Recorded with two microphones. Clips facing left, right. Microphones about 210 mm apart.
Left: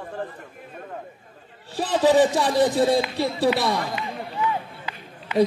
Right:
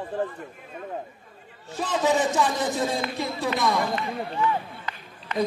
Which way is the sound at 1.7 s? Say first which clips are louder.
Left 5 dB; 35° left (ahead or behind).